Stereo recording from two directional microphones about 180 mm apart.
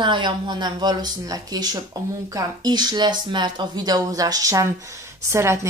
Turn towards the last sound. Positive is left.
turn(degrees=-15)  # may be behind; listen again after turning